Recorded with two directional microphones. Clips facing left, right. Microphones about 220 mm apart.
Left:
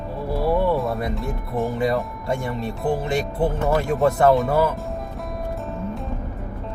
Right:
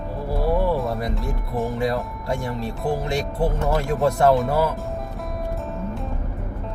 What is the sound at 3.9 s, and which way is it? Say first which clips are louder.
Speech: even; centre (ahead or behind).